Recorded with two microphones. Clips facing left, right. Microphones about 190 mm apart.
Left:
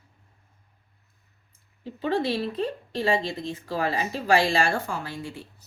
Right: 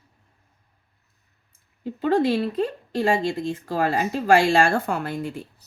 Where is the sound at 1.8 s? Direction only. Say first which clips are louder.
Right 5 dB; 45° right (ahead or behind).